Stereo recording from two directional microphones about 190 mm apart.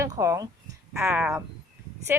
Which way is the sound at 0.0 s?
15° right (ahead or behind).